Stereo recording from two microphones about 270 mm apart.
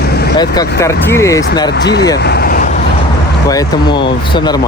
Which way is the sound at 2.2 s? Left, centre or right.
Left.